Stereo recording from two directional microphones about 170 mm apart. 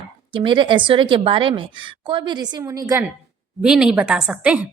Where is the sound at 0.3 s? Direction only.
30° right (ahead or behind).